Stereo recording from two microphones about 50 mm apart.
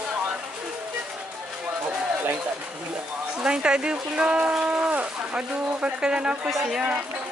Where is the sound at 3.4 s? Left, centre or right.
Centre.